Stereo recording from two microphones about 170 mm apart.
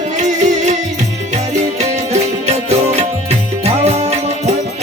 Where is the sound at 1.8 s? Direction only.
40° right (ahead or behind).